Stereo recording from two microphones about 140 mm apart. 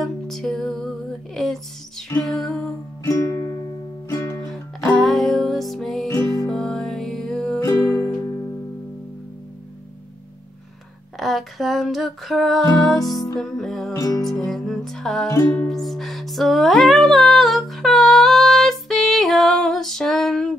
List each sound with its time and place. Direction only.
0.0 s music: centre (ahead or behind)
3.0 s music: 25° left (ahead or behind)
4.5 s music: centre (ahead or behind)
6.0 s music: 20° left (ahead or behind)
6.5 s music: centre (ahead or behind)
7.6 s music: 20° left (ahead or behind)
11.1 s music: centre (ahead or behind)
13.9 s music: 25° left (ahead or behind)
14.2 s music: centre (ahead or behind)
15.2 s music: 20° left (ahead or behind)
15.7 s music: centre (ahead or behind)